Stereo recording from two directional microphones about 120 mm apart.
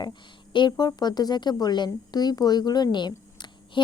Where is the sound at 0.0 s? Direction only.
40° left (ahead or behind).